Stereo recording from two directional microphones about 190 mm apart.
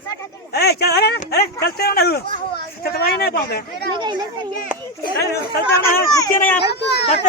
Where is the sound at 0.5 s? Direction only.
55° left (ahead or behind).